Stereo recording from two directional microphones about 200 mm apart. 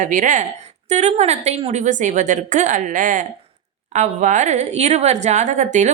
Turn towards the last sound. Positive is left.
turn(degrees=-35)  # may be behind; listen again after turning